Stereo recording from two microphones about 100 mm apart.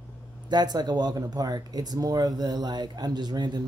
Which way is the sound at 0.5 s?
45° right (ahead or behind).